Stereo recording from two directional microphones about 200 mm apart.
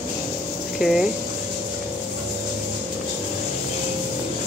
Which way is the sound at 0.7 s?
Centre (ahead or behind).